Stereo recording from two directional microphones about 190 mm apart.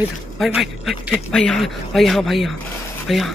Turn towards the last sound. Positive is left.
turn(degrees=0)  # may be behind; listen again after turning